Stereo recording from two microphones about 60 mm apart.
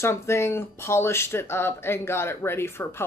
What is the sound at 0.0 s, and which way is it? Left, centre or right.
A woman's voice, left.